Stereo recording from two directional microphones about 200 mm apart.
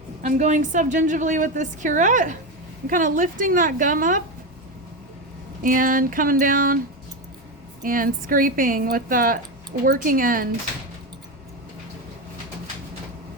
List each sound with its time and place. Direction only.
0.2 s a woman's voice: 35° right (ahead or behind)
5.6 s a woman's voice: 45° right (ahead or behind)
7.8 s a woman's voice: 45° right (ahead or behind)